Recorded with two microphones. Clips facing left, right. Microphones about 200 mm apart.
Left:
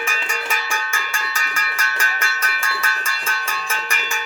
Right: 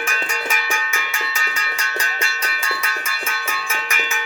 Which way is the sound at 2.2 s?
20° right (ahead or behind).